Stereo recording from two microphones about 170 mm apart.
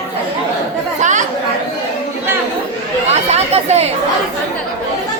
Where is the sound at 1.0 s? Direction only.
45° right (ahead or behind).